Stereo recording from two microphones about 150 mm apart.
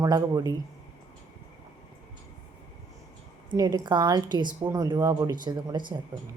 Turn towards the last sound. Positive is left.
turn(degrees=-30)  # may be behind; listen again after turning